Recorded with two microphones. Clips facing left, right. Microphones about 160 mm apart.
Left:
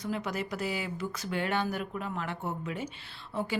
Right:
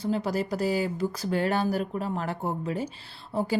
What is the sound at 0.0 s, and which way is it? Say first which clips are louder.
Speech: right 6 dB; 35° right (ahead or behind).